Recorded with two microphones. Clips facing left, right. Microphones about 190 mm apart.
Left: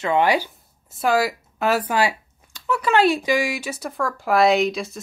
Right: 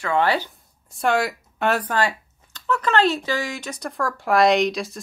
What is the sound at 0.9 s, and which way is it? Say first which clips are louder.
Speech: left 1 dB; centre (ahead or behind).